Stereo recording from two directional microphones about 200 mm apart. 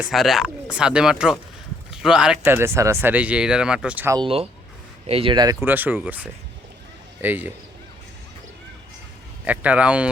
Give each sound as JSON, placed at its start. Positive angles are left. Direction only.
{"t": 0.0, "sound": "speech", "side_deg": 0}
{"t": 5.0, "sound": "speech", "side_deg": -30}
{"t": 5.6, "sound": "speech", "side_deg": -10}
{"t": 9.4, "sound": "speech", "side_deg": -5}